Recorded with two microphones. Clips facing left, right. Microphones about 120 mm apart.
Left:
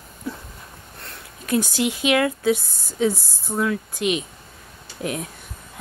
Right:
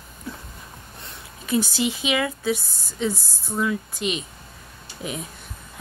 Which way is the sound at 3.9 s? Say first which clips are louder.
Left 4 dB; 65° left (ahead or behind).